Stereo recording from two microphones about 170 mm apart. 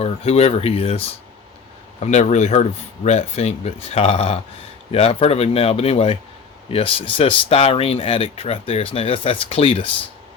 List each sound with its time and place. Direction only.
0.0 s speech: 40° left (ahead or behind)